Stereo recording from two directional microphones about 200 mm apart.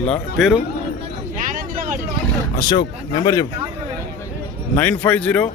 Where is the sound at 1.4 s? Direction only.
45° right (ahead or behind).